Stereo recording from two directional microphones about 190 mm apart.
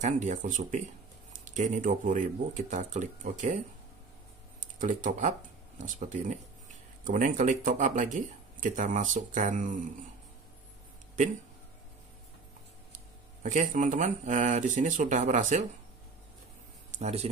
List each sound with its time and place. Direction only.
0.0 s speech: 40° right (ahead or behind)
13.4 s speech: 40° right (ahead or behind)
16.9 s speech: 35° right (ahead or behind)